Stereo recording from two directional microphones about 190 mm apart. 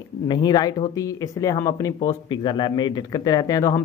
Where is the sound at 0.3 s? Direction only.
20° left (ahead or behind).